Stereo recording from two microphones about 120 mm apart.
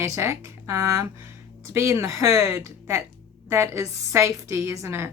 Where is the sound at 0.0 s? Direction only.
25° right (ahead or behind).